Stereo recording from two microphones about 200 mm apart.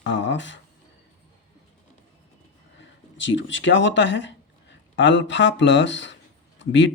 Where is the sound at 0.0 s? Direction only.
65° left (ahead or behind).